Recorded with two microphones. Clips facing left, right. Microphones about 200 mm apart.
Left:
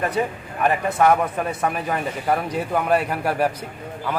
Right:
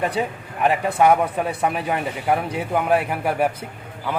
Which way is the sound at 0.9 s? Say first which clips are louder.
Right 1 dB; 15° right (ahead or behind).